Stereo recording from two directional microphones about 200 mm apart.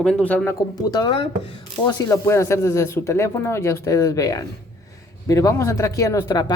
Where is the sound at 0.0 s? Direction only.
5° left (ahead or behind).